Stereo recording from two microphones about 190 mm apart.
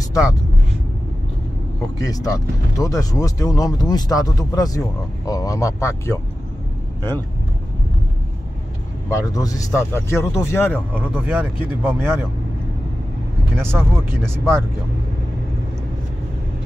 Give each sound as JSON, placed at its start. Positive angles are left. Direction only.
{"t": 2.0, "sound": "speech", "side_deg": 20}
{"t": 9.1, "sound": "speech", "side_deg": 20}
{"t": 10.9, "sound": "speech", "side_deg": -10}
{"t": 13.6, "sound": "speech", "side_deg": -15}